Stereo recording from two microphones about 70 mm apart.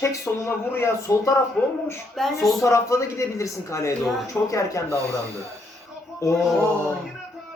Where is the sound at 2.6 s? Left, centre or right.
Left.